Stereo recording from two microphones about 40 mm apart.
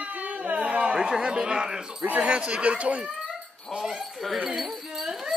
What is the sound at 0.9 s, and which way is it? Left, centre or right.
Speech, right.